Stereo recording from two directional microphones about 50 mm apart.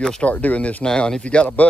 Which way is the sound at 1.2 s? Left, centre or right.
Left.